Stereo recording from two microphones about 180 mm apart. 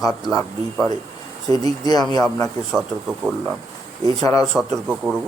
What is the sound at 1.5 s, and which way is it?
Speech, 20° left (ahead or behind).